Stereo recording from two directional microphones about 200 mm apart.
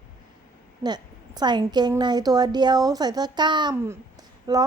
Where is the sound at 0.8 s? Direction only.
20° right (ahead or behind).